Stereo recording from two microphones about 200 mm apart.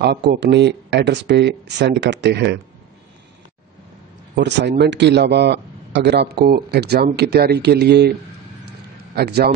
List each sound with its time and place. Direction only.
0.0 s a man's voice: 55° right (ahead or behind)
4.4 s a man's voice: 60° right (ahead or behind)